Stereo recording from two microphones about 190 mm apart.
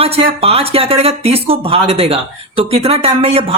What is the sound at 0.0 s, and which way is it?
Speech, 30° right (ahead or behind).